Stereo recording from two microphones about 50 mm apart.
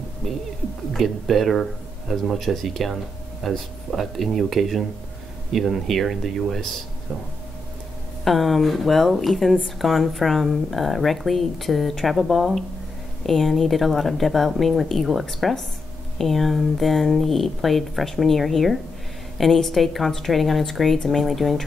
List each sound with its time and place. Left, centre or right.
0.9 s speech: centre
8.2 s speech: centre